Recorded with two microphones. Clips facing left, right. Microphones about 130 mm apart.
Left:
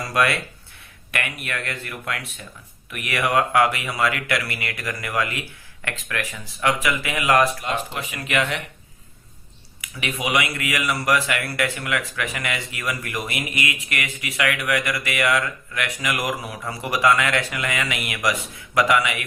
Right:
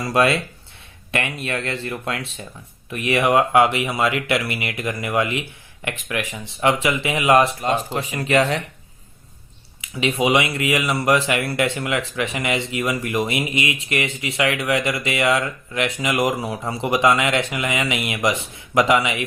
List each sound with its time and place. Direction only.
0.0 s speech: 25° right (ahead or behind)
7.6 s speech: 35° right (ahead or behind)
9.8 s speech: 25° right (ahead or behind)